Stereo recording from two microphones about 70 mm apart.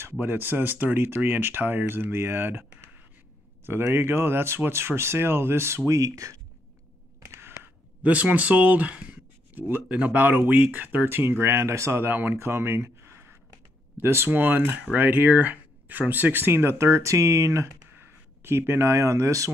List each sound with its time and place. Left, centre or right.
0.2 s speech: right
3.6 s speech: right
7.2 s a sound: right
8.0 s speech: right
17.9 s speech: right